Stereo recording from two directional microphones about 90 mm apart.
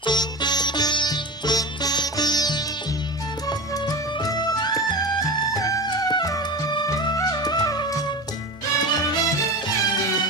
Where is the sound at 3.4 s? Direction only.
45° left (ahead or behind).